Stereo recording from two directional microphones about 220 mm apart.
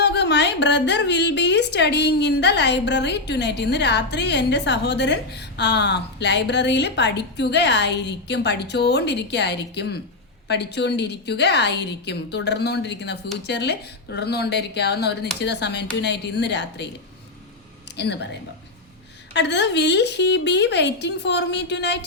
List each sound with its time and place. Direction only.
0.0 s a woman's voice: 50° left (ahead or behind)
17.9 s speech: 50° left (ahead or behind)
19.3 s a woman's voice: 50° left (ahead or behind)